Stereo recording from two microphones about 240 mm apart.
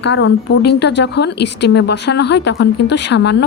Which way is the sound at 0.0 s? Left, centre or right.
Left.